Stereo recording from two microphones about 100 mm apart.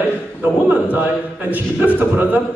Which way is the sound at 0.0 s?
15° right (ahead or behind).